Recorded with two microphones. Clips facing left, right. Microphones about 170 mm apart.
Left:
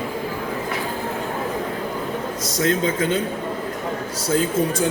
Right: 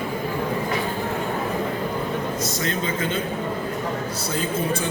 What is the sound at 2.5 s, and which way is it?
Speech, 90° left.